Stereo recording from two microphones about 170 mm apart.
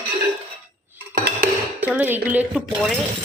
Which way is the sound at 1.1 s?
60° right (ahead or behind).